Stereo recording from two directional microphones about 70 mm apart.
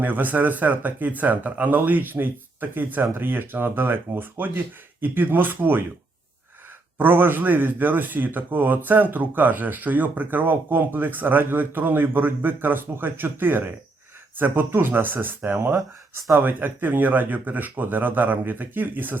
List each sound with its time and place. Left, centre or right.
0.0 s speech: right
7.0 s speech: right